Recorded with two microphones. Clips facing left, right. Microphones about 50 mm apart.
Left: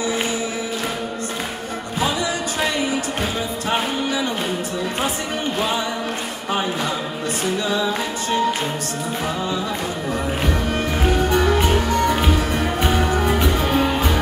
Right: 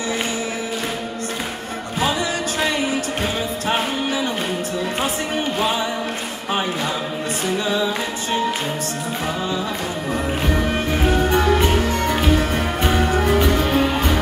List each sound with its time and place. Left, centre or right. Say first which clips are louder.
3.6 s music: even; centre
7.5 s music: right 2 dB; centre
11.2 s music: even; right
12.9 s music: right 4 dB; centre